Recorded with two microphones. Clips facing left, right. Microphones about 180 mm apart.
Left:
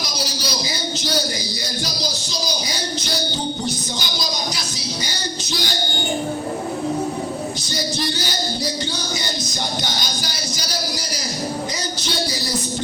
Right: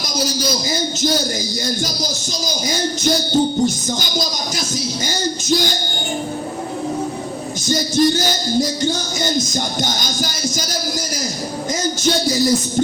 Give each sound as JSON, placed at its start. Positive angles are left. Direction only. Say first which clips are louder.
{"t": 2.6, "sound": "music", "louder": "right 8 dB", "side_deg": -45}
{"t": 5.0, "sound": "music", "louder": "right 9 dB", "side_deg": -45}
{"t": 7.7, "sound": "music", "louder": "right 12 dB", "side_deg": -45}